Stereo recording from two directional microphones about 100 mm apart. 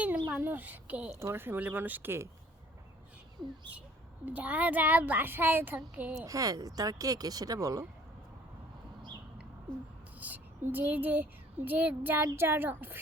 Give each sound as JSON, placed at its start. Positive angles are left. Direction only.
{"t": 0.3, "sound": "a child's voice", "side_deg": -15}
{"t": 4.3, "sound": "a child's voice", "side_deg": -15}
{"t": 6.2, "sound": "speech", "side_deg": -35}
{"t": 10.2, "sound": "a child's voice", "side_deg": -15}